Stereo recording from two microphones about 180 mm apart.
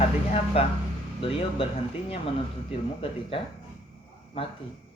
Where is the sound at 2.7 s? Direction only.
30° left (ahead or behind).